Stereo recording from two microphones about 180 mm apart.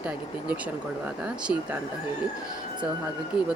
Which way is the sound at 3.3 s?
25° left (ahead or behind).